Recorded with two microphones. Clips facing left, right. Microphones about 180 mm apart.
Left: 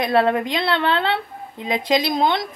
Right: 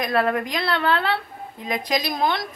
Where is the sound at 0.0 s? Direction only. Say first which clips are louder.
Left 4 dB; 25° left (ahead or behind).